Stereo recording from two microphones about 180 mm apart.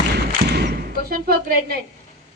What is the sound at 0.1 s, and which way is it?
Thump, 65° right (ahead or behind).